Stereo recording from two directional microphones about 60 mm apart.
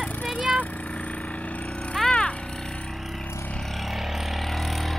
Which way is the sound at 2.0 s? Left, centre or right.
Centre.